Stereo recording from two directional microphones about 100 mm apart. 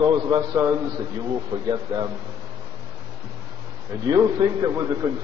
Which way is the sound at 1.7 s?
50° right (ahead or behind).